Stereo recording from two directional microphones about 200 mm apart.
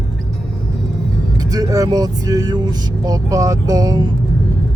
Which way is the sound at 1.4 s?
20° right (ahead or behind).